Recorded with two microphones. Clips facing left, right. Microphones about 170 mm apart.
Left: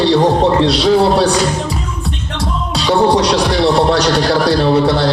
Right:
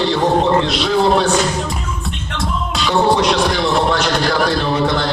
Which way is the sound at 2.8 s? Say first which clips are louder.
Left 3 dB; 35° left (ahead or behind).